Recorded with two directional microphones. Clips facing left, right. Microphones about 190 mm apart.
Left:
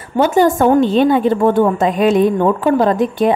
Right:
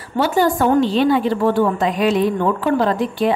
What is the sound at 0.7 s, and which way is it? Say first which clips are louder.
Speech: left 3 dB; 50° left (ahead or behind).